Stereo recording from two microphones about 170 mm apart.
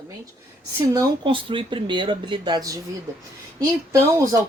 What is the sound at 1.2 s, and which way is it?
Speech, 30° right (ahead or behind).